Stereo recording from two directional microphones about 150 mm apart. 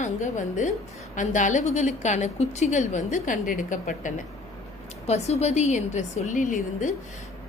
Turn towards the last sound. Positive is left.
turn(degrees=55)  # may be behind; listen again after turning